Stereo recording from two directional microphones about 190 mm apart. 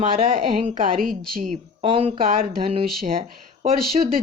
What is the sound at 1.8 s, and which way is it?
Speech, 30° right (ahead or behind).